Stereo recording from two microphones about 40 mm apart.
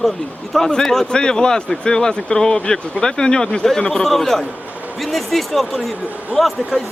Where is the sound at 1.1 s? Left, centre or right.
Left.